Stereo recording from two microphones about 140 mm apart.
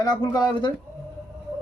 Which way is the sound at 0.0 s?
30° left (ahead or behind).